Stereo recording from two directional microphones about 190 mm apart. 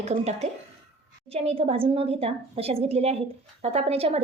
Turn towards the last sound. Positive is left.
turn(degrees=-30)  # may be behind; listen again after turning